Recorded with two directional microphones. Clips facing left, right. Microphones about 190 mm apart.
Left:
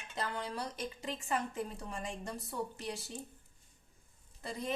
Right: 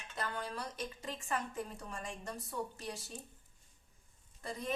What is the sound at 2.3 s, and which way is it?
Speech, 10° left (ahead or behind).